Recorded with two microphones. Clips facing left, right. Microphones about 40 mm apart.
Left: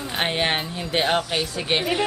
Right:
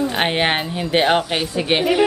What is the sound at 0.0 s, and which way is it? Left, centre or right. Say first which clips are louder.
A woman's voice: right 5 dB; right.